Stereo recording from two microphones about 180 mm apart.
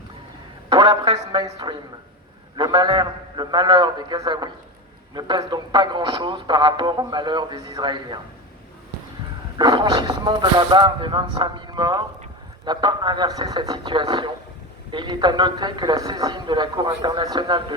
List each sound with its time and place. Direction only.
0.7 s a sound: 20° right (ahead or behind)
1.0 s speech: 25° right (ahead or behind)
9.6 s speech: 25° right (ahead or behind)